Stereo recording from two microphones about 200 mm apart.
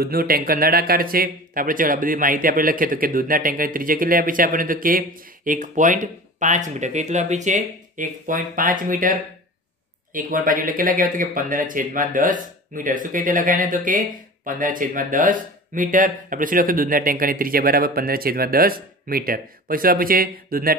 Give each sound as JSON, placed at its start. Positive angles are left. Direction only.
{"t": 0.0, "sound": "speech", "side_deg": -50}